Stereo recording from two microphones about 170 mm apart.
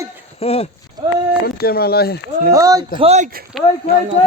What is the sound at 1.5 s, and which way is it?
Speech, 65° left (ahead or behind).